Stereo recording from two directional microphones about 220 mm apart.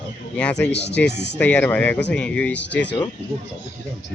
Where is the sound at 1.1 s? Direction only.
50° left (ahead or behind).